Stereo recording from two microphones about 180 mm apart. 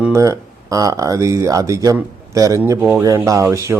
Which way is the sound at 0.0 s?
15° right (ahead or behind).